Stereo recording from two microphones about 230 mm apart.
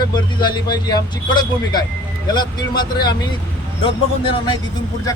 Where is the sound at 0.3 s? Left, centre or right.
Centre.